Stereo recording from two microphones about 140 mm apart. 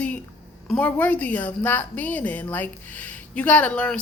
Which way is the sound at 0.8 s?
10° left (ahead or behind).